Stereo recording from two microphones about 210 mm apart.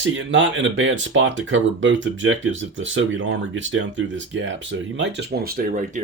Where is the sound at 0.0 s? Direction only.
60° right (ahead or behind).